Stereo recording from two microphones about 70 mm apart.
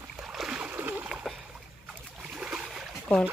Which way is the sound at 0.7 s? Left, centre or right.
Right.